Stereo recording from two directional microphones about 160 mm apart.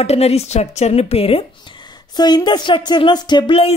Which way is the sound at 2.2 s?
25° left (ahead or behind).